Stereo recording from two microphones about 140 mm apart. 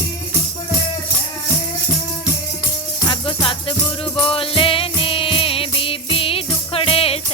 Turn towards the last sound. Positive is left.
turn(degrees=45)  # may be behind; listen again after turning